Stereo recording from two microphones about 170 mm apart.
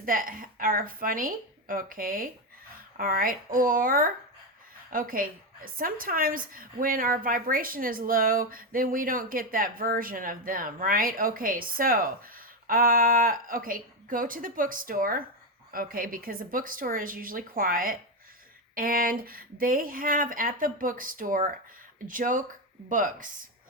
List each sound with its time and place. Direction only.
0.0 s a woman's voice: 55° right (ahead or behind)